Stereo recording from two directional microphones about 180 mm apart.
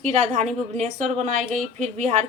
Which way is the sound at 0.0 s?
35° right (ahead or behind).